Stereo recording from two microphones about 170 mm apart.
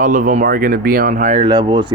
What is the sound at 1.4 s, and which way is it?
Speech, 25° right (ahead or behind).